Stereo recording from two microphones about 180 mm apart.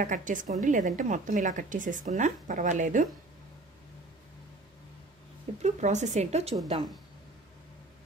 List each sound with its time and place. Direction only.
0.0 s a woman's voice: 45° right (ahead or behind)
5.6 s a woman's voice: 40° right (ahead or behind)